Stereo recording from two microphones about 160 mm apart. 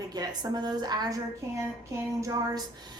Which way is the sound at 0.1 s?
25° right (ahead or behind).